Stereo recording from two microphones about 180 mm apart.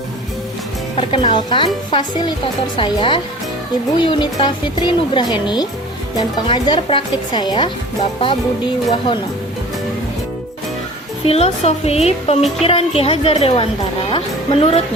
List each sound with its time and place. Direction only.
0.9 s speech: 25° left (ahead or behind)
11.3 s speech: 35° left (ahead or behind)